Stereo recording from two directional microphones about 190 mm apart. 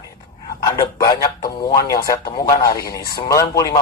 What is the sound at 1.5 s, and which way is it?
A man's voice, 20° left (ahead or behind).